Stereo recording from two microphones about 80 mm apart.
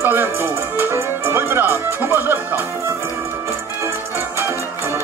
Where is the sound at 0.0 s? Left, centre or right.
Right.